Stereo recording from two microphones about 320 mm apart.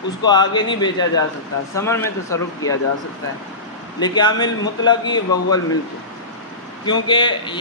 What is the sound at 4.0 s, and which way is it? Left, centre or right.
A man's voice, centre.